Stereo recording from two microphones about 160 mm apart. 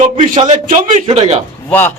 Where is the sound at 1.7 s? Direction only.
10° left (ahead or behind).